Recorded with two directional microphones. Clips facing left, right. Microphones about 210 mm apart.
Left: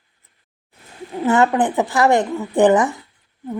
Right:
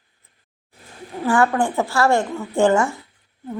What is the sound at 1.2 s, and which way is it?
Speech, 20° left (ahead or behind).